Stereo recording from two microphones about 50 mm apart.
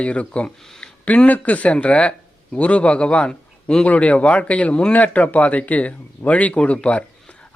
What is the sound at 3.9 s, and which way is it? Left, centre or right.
Speech, left.